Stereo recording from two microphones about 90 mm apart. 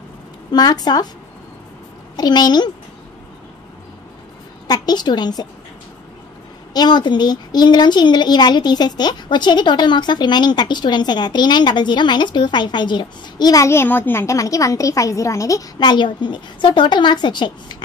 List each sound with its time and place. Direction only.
0.5 s a woman's voice: 45° left (ahead or behind)
2.1 s a woman's voice: 50° left (ahead or behind)
4.6 s a woman's voice: 50° left (ahead or behind)
6.7 s a woman's voice: 50° left (ahead or behind)
13.7 s a woman's voice: 25° left (ahead or behind)
15.8 s a woman's voice: 55° left (ahead or behind)